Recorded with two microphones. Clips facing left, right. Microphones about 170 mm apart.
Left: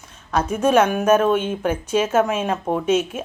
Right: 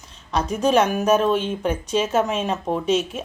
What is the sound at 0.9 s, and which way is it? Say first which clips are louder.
Speech: left 2 dB; 55° left (ahead or behind).